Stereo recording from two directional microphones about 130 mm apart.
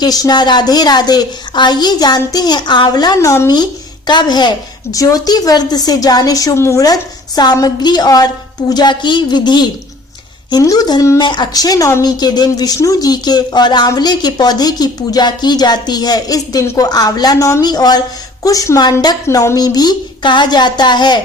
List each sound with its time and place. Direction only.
0.0 s a woman's voice: 30° left (ahead or behind)